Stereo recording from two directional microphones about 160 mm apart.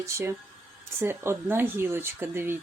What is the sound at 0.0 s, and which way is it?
Speech, 15° right (ahead or behind).